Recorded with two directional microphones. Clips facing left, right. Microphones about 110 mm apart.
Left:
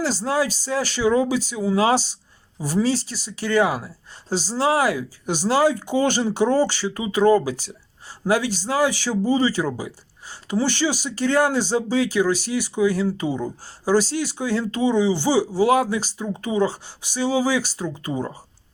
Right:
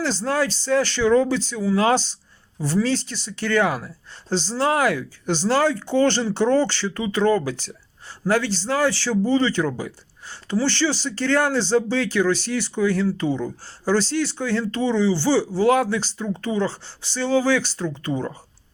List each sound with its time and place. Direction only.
0.0 s speech: 10° left (ahead or behind)